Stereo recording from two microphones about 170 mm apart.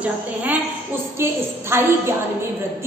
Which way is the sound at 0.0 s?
10° right (ahead or behind).